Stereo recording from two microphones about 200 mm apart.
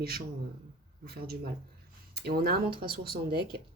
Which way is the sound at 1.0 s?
50° right (ahead or behind).